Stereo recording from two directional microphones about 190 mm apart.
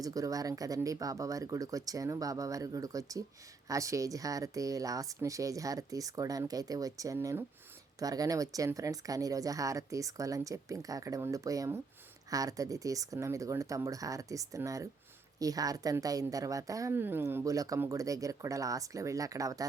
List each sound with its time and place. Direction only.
0.0 s a woman's voice: 20° right (ahead or behind)